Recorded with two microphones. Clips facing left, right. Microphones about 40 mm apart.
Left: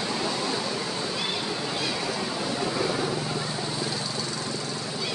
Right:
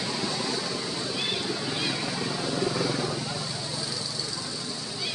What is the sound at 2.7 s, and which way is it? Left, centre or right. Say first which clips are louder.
Vehicle: left 1 dB; centre.